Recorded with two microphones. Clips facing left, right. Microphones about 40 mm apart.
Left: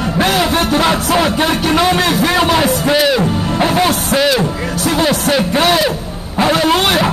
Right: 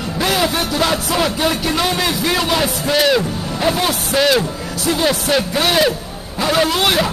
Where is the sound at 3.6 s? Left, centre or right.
Left.